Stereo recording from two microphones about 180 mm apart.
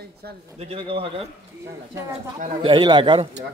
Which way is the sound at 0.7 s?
30° right (ahead or behind).